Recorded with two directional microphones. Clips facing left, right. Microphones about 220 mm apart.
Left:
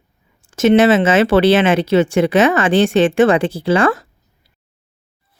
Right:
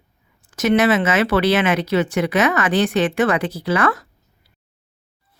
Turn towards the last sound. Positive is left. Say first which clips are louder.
# left 5 dB
turn(degrees=30)  # may be behind; listen again after turning